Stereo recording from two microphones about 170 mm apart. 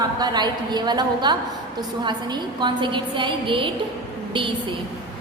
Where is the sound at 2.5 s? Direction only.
30° right (ahead or behind).